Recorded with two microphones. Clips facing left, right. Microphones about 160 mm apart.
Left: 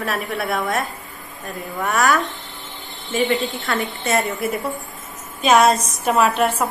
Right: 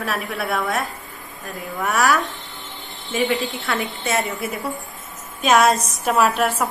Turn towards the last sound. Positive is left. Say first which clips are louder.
# left 1 dB
turn(degrees=0)  # may be behind; listen again after turning